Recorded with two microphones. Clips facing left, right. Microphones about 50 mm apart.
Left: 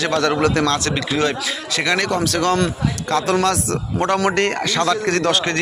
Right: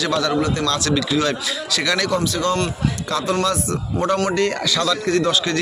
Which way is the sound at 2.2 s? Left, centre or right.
Left.